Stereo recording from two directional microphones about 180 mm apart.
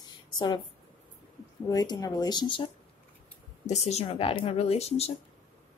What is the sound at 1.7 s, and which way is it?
Speech, 20° left (ahead or behind).